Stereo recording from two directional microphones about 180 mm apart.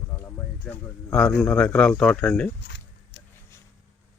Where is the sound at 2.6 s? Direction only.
65° left (ahead or behind).